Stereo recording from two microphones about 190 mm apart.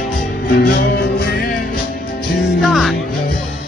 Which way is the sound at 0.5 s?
50° left (ahead or behind).